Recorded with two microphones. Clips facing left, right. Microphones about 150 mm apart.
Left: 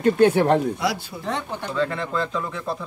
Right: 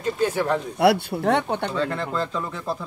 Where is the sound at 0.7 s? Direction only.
65° right (ahead or behind).